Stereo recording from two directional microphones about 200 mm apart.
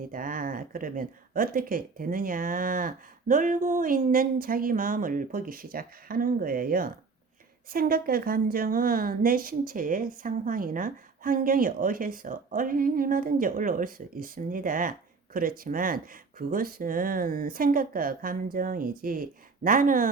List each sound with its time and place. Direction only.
0.1 s a woman's voice: 45° right (ahead or behind)